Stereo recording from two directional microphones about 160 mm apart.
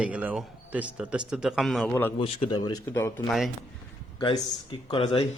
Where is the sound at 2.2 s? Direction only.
35° left (ahead or behind); by 3.2 s 15° left (ahead or behind).